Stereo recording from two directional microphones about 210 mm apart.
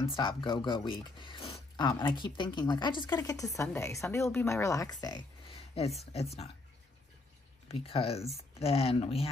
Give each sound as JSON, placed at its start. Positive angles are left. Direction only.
{"t": 0.0, "sound": "speech", "side_deg": 25}
{"t": 6.1, "sound": "speech", "side_deg": 30}
{"t": 7.6, "sound": "speech", "side_deg": 30}